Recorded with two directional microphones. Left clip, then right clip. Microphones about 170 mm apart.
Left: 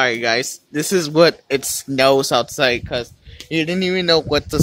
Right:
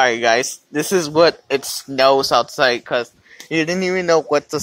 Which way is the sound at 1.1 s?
25° left (ahead or behind).